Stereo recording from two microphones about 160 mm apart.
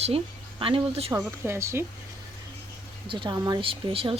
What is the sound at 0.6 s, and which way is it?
Speech, 35° right (ahead or behind).